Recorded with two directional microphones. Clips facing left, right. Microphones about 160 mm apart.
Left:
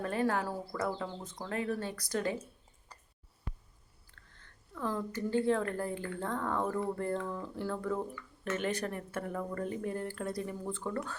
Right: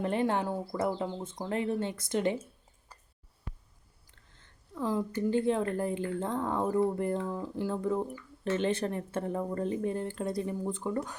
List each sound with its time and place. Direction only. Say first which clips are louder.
0.0 s speech: right 3 dB; 25° right (ahead or behind)
4.1 s a woman's voice: left 1 dB; 20° right (ahead or behind)